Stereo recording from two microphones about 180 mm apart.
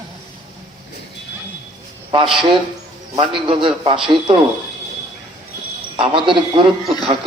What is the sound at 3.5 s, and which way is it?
Speech, 30° right (ahead or behind).